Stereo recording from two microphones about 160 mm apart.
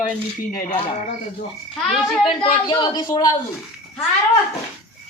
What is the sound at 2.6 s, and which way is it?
Speech, 25° left (ahead or behind).